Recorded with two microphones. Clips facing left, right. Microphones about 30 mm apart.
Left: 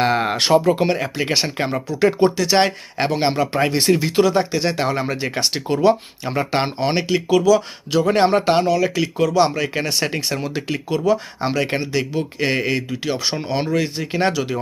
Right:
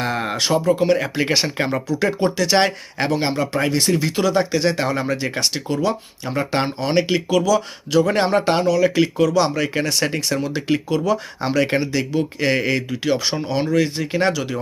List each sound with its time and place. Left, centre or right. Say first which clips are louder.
0.0 s a sound: left 5 dB; left
0.3 s speech: left 1 dB; left
0.9 s speech: right 1 dB; centre
2.3 s speech: even; centre
3.1 s speech: left 1 dB; centre
5.6 s speech: left 5 dB; left; by 13.4 s centre
13.4 s speech: right 1 dB; centre